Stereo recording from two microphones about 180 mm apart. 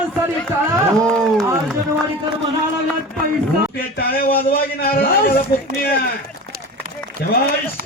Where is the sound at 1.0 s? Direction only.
5° left (ahead or behind).